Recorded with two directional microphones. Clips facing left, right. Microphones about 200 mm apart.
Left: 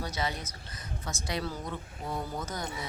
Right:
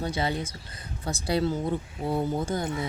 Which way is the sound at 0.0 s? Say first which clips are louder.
Right 6 dB; 30° right (ahead or behind).